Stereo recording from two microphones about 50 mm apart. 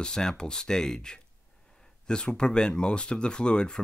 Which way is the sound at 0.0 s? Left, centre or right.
Centre.